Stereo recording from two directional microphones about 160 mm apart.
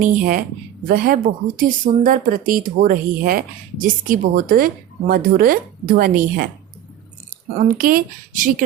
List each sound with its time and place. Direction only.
0.0 s speech: 60° right (ahead or behind)
7.8 s speech: 60° right (ahead or behind)